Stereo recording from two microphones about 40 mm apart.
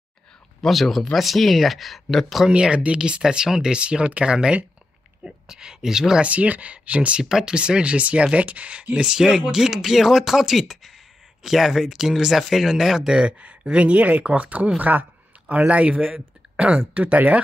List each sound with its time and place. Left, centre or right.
0.6 s speech: centre
2.7 s speech: right
3.2 s speech: centre
6.2 s speech: right
7.2 s speech: centre; by 8.8 s right
8.9 s speech: right
13.1 s speech: right
14.8 s speech: right